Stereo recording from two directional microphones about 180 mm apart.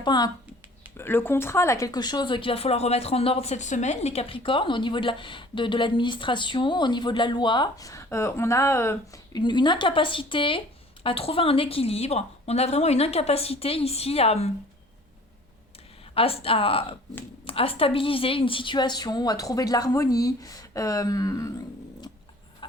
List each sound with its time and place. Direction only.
0.0 s speech: 25° left (ahead or behind)
0.9 s a woman's voice: 10° left (ahead or behind); by 14.5 s 35° left (ahead or behind)
16.1 s a woman's voice: 30° left (ahead or behind)